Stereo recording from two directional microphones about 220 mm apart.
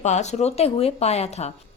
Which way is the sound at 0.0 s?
30° left (ahead or behind).